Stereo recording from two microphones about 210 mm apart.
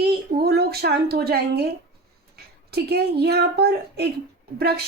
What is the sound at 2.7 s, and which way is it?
Speech, 50° right (ahead or behind).